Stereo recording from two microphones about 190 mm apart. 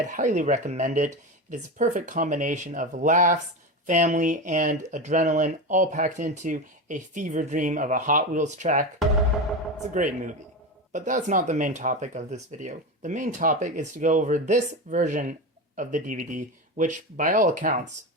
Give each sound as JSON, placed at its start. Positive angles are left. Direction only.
{"t": 0.1, "sound": "speech", "side_deg": -40}
{"t": 9.9, "sound": "a man's voice", "side_deg": -40}